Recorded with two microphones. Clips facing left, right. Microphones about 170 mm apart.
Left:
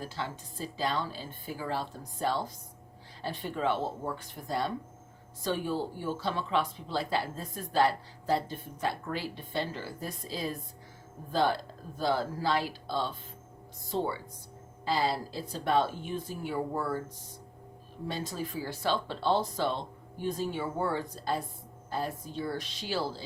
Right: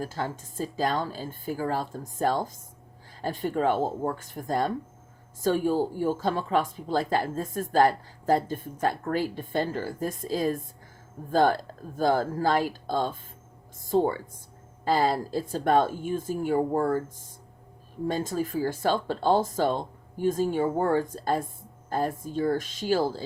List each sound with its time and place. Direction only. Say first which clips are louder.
0.0 s speech: right 6 dB; 45° right (ahead or behind)
18.1 s speech: right 7 dB; 50° right (ahead or behind)